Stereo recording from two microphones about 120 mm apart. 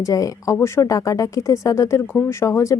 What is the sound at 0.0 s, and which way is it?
A woman's voice, 30° left (ahead or behind).